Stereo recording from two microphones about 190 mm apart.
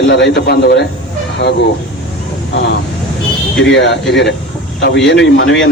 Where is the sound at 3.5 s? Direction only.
75° left (ahead or behind).